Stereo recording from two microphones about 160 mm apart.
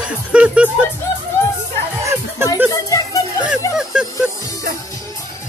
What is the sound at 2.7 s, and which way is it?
Music, 20° left (ahead or behind).